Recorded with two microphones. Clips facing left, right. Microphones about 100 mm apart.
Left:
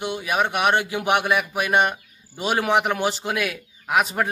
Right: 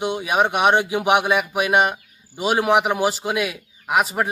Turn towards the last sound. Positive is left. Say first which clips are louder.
# right 1 dB
turn(degrees=-10)  # may be behind; listen again after turning